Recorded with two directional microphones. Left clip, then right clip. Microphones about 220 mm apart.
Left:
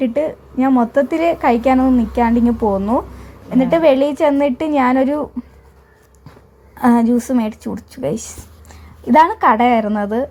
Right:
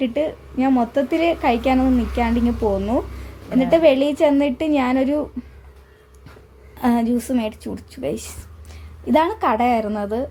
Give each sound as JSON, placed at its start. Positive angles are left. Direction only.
{"t": 0.0, "sound": "a woman's voice", "side_deg": 15}
{"t": 6.7, "sound": "a woman's voice", "side_deg": 20}